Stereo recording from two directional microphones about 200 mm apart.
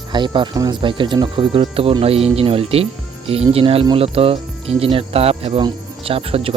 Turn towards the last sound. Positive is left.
turn(degrees=-30)  # may be behind; listen again after turning